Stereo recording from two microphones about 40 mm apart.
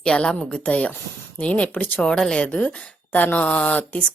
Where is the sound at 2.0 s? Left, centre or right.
Centre.